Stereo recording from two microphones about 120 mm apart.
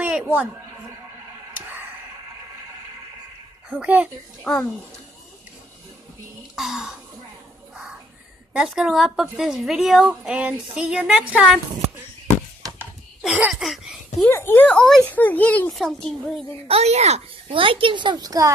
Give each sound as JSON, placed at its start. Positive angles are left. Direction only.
{"t": 0.0, "sound": "a sound", "side_deg": -10}
{"t": 3.8, "sound": "a child's voice", "side_deg": -10}
{"t": 6.5, "sound": "throat clearing", "side_deg": 0}
{"t": 8.5, "sound": "a woman's voice", "side_deg": -5}
{"t": 13.2, "sound": "a woman's voice", "side_deg": -5}
{"t": 14.2, "sound": "speech", "side_deg": 20}
{"t": 15.7, "sound": "a woman's voice", "side_deg": 0}
{"t": 16.6, "sound": "a child's voice", "side_deg": -60}
{"t": 17.5, "sound": "a child's voice", "side_deg": -45}